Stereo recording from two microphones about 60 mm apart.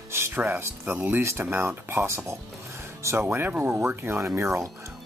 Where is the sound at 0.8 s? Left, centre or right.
Right.